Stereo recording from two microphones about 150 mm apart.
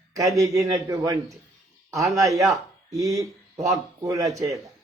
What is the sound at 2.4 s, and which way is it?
A man's voice, 20° right (ahead or behind).